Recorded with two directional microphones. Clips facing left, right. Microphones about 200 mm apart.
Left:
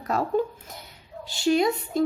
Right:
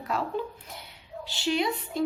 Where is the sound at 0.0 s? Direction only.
45° left (ahead or behind).